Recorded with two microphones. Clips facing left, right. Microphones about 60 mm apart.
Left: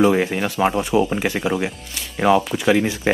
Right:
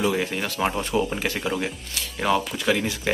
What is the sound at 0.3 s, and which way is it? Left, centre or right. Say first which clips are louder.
Speech: left 6 dB; centre.